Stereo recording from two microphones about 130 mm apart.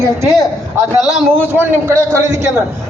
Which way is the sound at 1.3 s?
15° right (ahead or behind).